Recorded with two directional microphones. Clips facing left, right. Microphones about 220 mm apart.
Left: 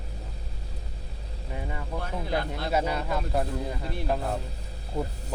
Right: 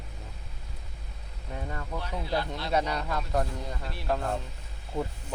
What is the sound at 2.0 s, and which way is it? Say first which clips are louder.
Speech: left 2 dB; 50° left (ahead or behind).